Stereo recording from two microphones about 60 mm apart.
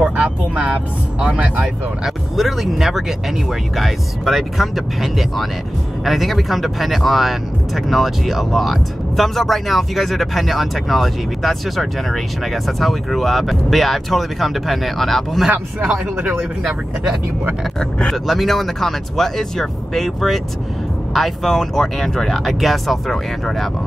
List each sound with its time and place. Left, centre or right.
0.0 s music: right
1.2 s speech: centre
2.0 s speech: centre
16.2 s speech: right
17.7 s speech: centre